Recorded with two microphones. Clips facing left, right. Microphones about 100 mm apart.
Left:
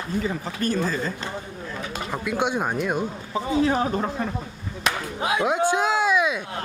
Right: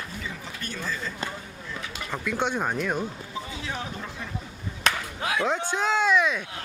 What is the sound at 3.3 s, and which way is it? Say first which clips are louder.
Speech: left 14 dB; 40° left (ahead or behind).